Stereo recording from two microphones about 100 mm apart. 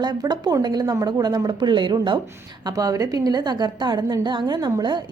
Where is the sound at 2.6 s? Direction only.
35° right (ahead or behind).